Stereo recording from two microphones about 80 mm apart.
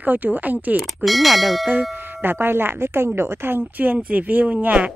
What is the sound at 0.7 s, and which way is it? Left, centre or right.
Speech, centre.